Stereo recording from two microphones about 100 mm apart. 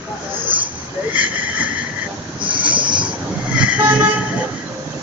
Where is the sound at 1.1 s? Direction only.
15° right (ahead or behind).